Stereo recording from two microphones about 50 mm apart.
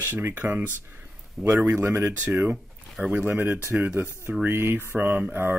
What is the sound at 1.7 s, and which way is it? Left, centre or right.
Speech, right.